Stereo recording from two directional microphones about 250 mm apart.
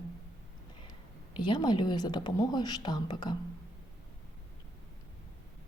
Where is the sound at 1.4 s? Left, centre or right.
Centre.